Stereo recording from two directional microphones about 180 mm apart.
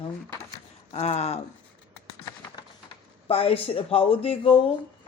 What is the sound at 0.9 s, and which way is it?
Speech, 35° left (ahead or behind).